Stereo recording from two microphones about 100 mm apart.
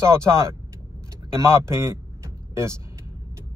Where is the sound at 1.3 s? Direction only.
30° right (ahead or behind).